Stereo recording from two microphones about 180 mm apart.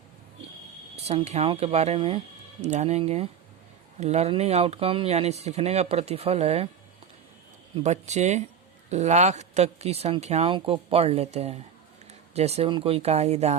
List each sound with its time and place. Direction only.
0.9 s speech: 35° right (ahead or behind)
7.8 s speech: 40° right (ahead or behind)